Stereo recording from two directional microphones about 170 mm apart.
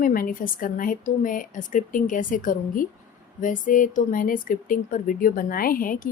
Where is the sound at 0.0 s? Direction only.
55° left (ahead or behind).